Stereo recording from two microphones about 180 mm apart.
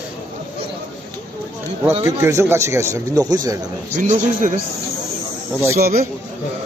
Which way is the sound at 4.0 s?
45° right (ahead or behind).